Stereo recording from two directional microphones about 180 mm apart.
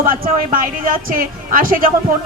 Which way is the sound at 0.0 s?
50° right (ahead or behind).